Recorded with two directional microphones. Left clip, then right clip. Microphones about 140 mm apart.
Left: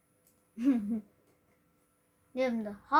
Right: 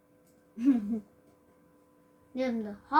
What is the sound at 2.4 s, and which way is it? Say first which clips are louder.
Speech: left 1 dB; 40° left (ahead or behind).